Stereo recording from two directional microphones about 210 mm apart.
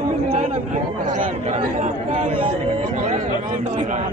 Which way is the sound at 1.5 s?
35° right (ahead or behind).